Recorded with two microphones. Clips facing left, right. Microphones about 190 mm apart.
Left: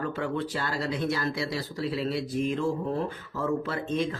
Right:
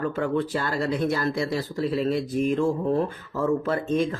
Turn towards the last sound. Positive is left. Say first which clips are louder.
# right 5 dB
turn(degrees=-50)  # may be behind; listen again after turning